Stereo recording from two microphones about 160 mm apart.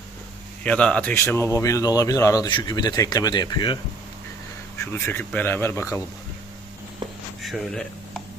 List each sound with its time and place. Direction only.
0.6 s speech: 5° left (ahead or behind)
1.1 s speech: 15° left (ahead or behind)
4.9 s speech: 15° left (ahead or behind)
7.4 s speech: centre (ahead or behind)